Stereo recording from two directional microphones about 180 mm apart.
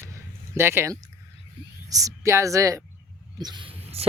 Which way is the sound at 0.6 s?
15° right (ahead or behind).